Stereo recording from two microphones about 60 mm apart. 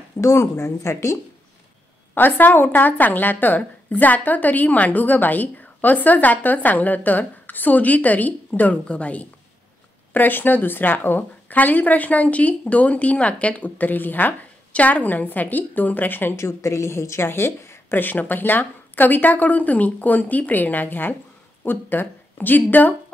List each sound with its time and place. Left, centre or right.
0.2 s speech: left
2.1 s a woman's voice: left
10.1 s a woman's voice: left
16.3 s speech: left
18.0 s a woman's voice: left